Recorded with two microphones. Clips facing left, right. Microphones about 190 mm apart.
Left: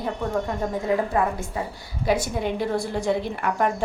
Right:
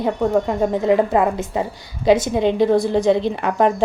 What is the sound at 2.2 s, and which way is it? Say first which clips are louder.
Speech: right 9 dB; 90° right.